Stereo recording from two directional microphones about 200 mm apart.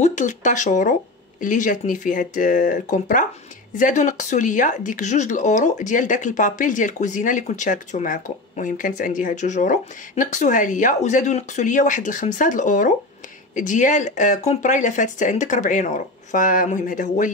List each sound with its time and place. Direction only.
0.0 s speech: 40° left (ahead or behind)